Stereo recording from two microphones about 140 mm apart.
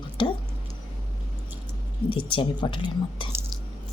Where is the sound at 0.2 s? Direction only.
35° left (ahead or behind).